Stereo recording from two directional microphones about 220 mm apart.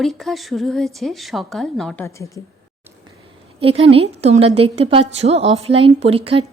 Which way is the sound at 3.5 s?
25° right (ahead or behind).